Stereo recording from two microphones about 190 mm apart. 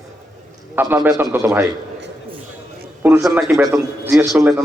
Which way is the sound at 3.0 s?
10° right (ahead or behind).